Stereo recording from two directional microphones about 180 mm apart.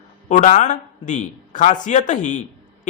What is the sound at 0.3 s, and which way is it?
A man's voice, 40° left (ahead or behind).